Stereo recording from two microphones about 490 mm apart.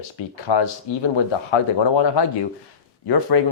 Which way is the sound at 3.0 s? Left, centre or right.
Left.